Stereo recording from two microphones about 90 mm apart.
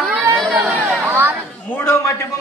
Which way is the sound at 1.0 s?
25° right (ahead or behind).